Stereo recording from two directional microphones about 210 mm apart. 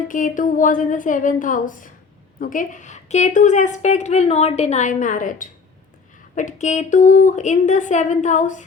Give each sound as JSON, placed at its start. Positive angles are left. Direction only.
{"t": 0.1, "sound": "a woman's voice", "side_deg": 40}